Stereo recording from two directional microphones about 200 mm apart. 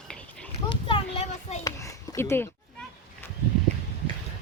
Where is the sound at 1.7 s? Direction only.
15° left (ahead or behind).